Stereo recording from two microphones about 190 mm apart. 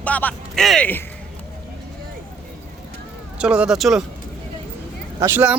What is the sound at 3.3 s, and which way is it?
Speech, 5° right (ahead or behind).